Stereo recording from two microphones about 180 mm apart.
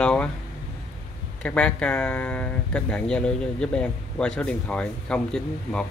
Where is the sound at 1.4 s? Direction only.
5° left (ahead or behind).